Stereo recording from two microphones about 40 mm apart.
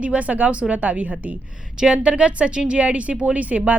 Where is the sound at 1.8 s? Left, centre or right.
Right.